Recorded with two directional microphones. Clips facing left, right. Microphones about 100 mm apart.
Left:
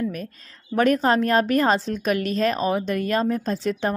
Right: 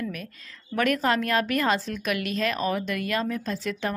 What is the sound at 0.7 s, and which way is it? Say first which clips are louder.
A woman's voice: left 5 dB; 30° left (ahead or behind).